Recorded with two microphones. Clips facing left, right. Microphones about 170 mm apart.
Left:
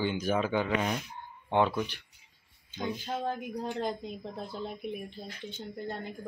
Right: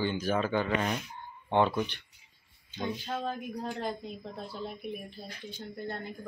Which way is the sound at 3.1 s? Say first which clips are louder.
Left 1 dB; 15° left (ahead or behind).